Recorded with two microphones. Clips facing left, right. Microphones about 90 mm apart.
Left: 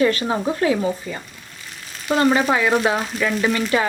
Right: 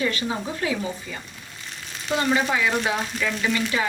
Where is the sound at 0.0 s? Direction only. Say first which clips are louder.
Left 7 dB; 50° left (ahead or behind).